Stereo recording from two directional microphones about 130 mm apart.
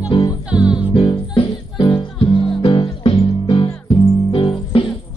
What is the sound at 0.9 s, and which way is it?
Music, 40° left (ahead or behind).